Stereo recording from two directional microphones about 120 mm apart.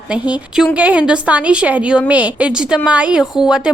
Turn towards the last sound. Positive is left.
turn(degrees=-5)  # may be behind; listen again after turning